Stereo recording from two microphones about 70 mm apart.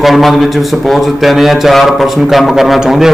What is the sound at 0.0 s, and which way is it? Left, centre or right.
A man's voice, centre.